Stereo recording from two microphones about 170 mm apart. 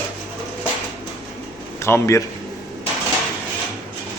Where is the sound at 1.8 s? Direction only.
15° left (ahead or behind).